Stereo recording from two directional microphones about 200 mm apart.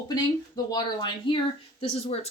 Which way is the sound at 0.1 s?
20° left (ahead or behind).